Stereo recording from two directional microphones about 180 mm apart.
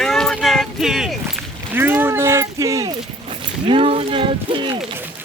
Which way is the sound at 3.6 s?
30° right (ahead or behind).